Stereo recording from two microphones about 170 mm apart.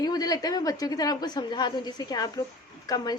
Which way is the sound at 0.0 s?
25° left (ahead or behind).